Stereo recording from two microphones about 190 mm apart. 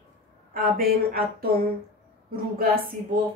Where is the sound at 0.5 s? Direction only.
50° right (ahead or behind).